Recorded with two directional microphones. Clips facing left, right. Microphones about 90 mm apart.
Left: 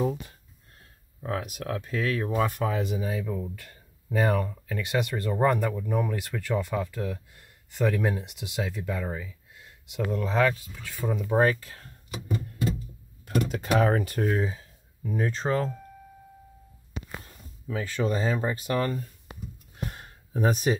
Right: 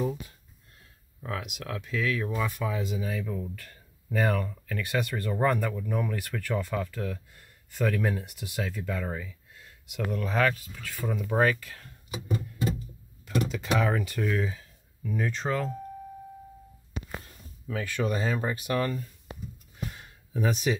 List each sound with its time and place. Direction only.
1.2 s speech: 40° left (ahead or behind)
2.4 s speech: 60° left (ahead or behind)
3.2 s speech: 15° left (ahead or behind)
9.8 s speech: 25° left (ahead or behind)
13.2 s speech: 50° left (ahead or behind)
17.6 s speech: 25° left (ahead or behind)
19.8 s a sound: 45° left (ahead or behind)